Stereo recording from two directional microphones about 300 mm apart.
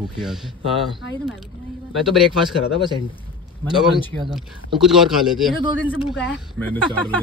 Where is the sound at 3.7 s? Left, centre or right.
Centre.